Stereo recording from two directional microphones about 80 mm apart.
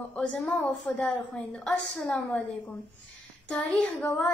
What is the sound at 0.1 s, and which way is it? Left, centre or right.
A woman's voice, centre.